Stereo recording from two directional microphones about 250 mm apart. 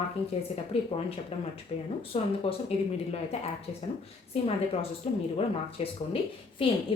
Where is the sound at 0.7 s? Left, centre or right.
Left.